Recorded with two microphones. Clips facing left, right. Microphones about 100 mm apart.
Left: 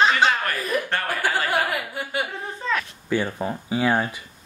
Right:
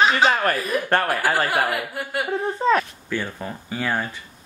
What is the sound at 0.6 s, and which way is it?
Speech, centre (ahead or behind).